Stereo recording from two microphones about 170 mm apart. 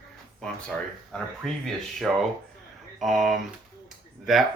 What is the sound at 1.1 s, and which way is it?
Speech, 5° left (ahead or behind).